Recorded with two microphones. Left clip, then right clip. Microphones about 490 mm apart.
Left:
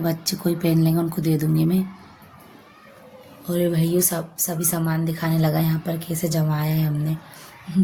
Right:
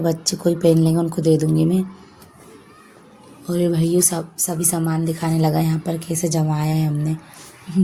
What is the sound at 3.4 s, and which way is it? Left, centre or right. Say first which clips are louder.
Speech: right 2 dB; left.